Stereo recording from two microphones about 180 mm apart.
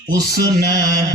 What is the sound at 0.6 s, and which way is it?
Mantra, 55° right (ahead or behind).